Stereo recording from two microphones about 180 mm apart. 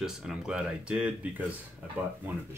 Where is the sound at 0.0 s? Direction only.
5° right (ahead or behind).